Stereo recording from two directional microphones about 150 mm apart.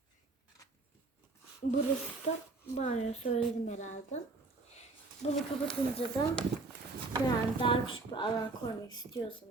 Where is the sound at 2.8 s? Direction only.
45° left (ahead or behind).